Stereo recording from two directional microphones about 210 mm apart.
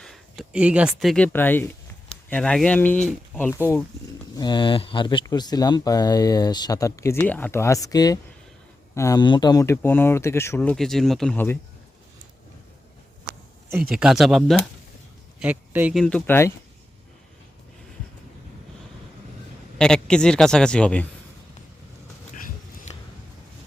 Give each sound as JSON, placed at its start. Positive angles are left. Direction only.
{"t": 0.0, "sound": "a sound", "side_deg": 0}
{"t": 0.9, "sound": "a man's voice", "side_deg": 0}
{"t": 13.9, "sound": "a man's voice", "side_deg": 0}
{"t": 16.0, "sound": "speech", "side_deg": 10}
{"t": 19.8, "sound": "a man's voice", "side_deg": 5}